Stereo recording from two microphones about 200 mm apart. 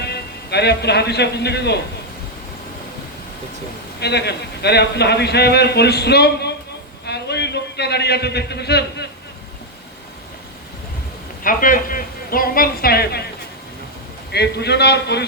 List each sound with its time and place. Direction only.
0.0 s a man's voice: 55° left (ahead or behind)
4.0 s a man's voice: 55° left (ahead or behind)
7.0 s a sound: 55° left (ahead or behind)
11.4 s a woman's voice: 45° left (ahead or behind)
14.3 s a man's voice: 55° left (ahead or behind)